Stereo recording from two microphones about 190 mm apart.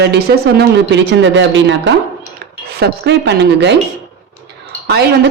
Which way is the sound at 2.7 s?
60° right (ahead or behind).